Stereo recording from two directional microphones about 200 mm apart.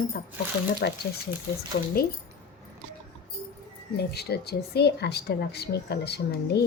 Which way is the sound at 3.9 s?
55° left (ahead or behind).